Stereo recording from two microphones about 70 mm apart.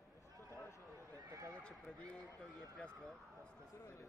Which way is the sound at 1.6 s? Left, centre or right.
Centre.